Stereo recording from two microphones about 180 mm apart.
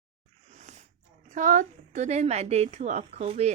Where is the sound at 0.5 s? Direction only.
40° right (ahead or behind).